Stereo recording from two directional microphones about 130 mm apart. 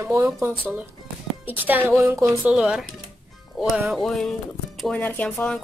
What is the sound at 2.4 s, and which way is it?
A woman's voice, 5° right (ahead or behind).